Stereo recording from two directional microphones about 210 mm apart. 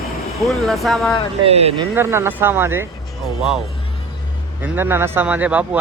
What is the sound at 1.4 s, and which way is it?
Speech, 30° right (ahead or behind).